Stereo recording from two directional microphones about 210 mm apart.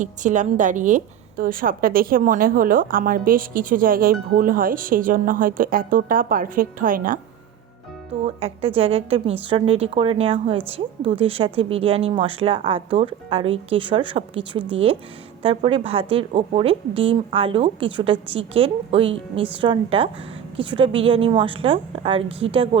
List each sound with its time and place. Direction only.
0.0 s a woman's voice: 35° right (ahead or behind)
8.4 s a woman's voice: 30° right (ahead or behind)